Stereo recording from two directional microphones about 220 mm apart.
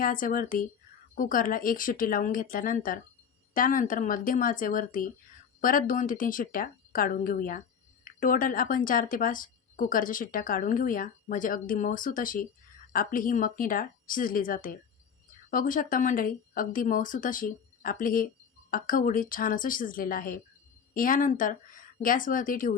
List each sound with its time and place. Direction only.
0.0 s speech: 40° left (ahead or behind)